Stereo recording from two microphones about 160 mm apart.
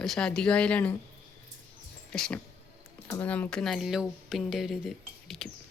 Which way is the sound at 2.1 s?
5° left (ahead or behind).